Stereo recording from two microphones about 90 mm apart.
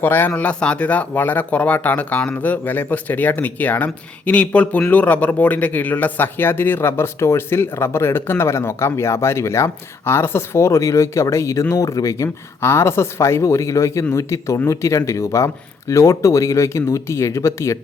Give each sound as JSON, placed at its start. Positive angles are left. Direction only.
{"t": 0.0, "sound": "speech", "side_deg": 25}